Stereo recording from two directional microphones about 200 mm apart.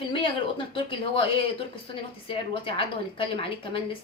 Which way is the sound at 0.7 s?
25° left (ahead or behind).